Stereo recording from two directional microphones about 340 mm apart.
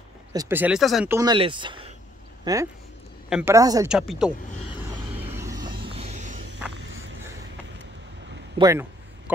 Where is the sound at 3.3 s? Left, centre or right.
Centre.